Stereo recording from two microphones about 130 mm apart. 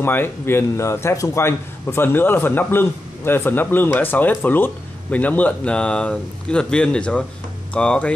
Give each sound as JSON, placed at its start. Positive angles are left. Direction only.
{"t": 0.0, "sound": "a man's voice", "side_deg": 15}